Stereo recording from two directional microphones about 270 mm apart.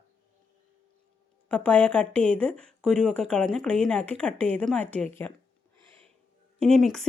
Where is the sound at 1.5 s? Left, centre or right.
Centre.